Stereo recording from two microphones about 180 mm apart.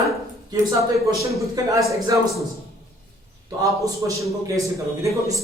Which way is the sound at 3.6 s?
20° right (ahead or behind).